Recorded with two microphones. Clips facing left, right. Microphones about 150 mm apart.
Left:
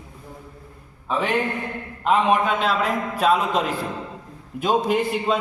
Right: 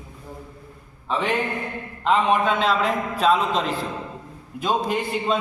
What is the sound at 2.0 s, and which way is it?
A man's voice, 5° left (ahead or behind).